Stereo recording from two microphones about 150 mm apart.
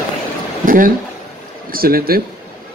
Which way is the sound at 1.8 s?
80° right.